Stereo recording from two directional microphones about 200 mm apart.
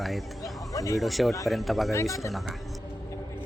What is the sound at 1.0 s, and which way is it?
A man's voice, centre (ahead or behind).